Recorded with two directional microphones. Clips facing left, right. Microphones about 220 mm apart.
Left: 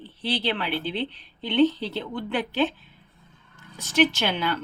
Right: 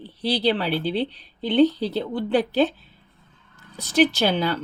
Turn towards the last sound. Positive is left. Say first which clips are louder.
# right 5 dB
turn(degrees=-35)  # may be behind; listen again after turning